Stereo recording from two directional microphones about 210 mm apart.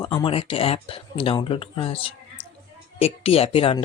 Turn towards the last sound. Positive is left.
turn(degrees=25)  # may be behind; listen again after turning